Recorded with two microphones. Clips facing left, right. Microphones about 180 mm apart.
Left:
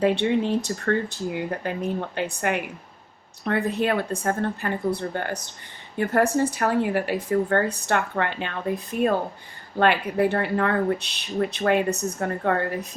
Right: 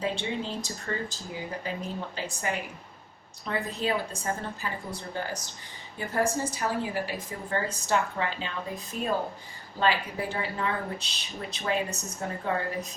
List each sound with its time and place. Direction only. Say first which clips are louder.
0.0 s a woman's voice: left 10 dB; 65° left (ahead or behind)